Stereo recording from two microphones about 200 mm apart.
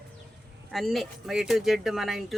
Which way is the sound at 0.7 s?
Centre (ahead or behind).